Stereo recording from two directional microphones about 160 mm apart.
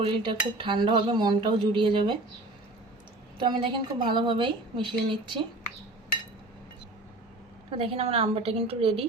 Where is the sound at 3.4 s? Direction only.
30° right (ahead or behind).